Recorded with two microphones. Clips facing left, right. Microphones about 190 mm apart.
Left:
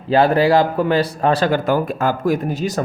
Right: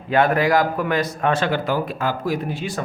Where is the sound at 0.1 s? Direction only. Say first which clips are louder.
Left 4 dB; 30° left (ahead or behind).